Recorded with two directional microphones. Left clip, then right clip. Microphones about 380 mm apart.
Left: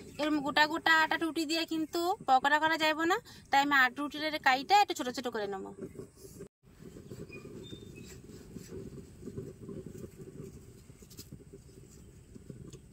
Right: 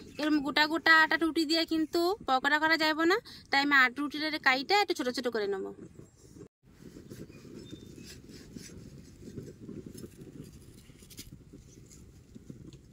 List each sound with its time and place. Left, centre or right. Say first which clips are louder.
0.1 s speech: right 1 dB; centre